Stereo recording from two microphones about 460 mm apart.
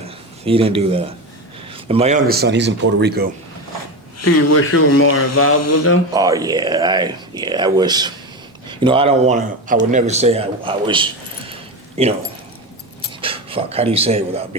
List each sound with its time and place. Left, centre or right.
0.4 s a man's voice: centre
4.2 s speech: left
6.1 s speech: centre
13.2 s speech: centre